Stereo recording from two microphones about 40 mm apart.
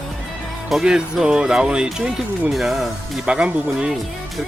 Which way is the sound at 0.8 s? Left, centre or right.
Centre.